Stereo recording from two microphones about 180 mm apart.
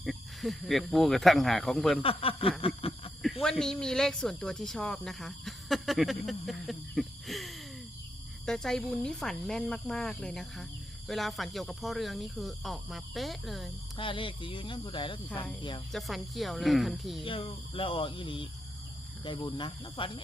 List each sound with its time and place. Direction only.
0.0 s speech: centre (ahead or behind)
2.0 s a sound: 30° left (ahead or behind)
3.4 s speech: 5° left (ahead or behind)
13.9 s speech: 30° left (ahead or behind)
15.9 s speech: centre (ahead or behind)
17.2 s speech: 30° left (ahead or behind)